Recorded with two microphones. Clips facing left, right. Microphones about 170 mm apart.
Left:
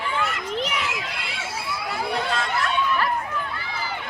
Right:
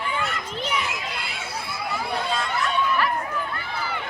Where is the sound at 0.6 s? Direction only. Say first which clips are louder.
Right 1 dB; 80° left.